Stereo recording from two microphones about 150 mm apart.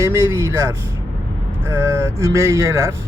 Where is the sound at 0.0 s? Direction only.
20° right (ahead or behind).